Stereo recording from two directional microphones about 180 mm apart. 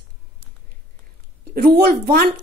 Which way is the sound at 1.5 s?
60° right (ahead or behind).